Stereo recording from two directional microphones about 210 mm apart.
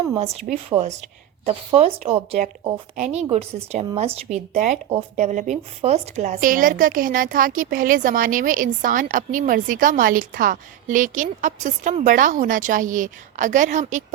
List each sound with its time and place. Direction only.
0.2 s speech: 30° right (ahead or behind)